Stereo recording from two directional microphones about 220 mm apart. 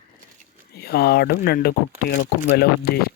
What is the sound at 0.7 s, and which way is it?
Speech, 45° left (ahead or behind).